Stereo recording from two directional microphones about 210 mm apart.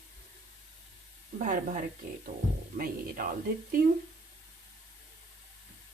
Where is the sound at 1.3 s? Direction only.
35° right (ahead or behind).